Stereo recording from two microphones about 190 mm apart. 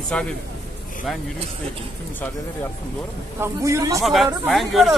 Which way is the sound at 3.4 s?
15° right (ahead or behind).